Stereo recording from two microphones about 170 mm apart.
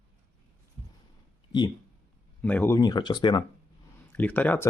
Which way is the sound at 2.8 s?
25° left (ahead or behind).